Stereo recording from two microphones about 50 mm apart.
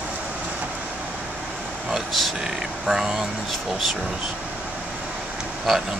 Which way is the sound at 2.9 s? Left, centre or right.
Centre.